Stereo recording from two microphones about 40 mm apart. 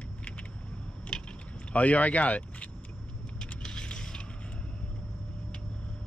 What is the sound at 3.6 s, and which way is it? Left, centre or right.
Mechanisms, left.